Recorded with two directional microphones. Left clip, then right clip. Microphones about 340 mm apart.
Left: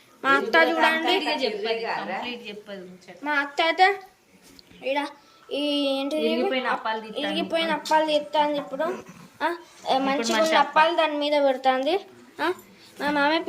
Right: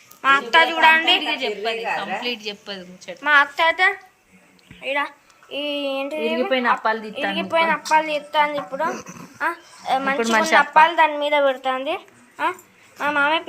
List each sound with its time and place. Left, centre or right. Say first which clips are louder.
0.2 s a woman's voice: right 4 dB; centre
1.2 s a woman's voice: right 2 dB; centre
3.2 s a woman's voice: right 7 dB; centre
6.5 s a woman's voice: right 6 dB; centre
7.9 s a woman's voice: right 2 dB; centre
10.2 s a woman's voice: right 5 dB; centre
10.9 s a woman's voice: right 5 dB; centre
13.0 s a woman's voice: right 3 dB; centre